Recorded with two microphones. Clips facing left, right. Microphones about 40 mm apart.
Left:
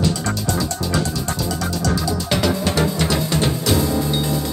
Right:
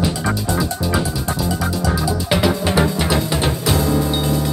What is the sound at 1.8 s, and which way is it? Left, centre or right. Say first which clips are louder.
Music: even; centre.